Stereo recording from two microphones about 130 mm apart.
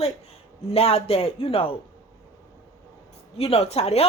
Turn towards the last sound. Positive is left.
turn(degrees=55)  # may be behind; listen again after turning